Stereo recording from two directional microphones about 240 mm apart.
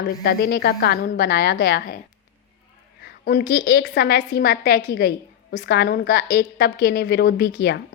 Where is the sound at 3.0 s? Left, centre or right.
Left.